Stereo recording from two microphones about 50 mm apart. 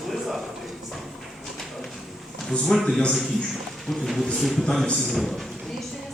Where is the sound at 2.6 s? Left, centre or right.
Centre.